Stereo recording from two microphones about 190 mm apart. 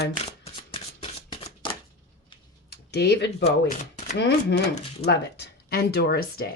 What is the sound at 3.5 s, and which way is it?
Speech, 35° left (ahead or behind).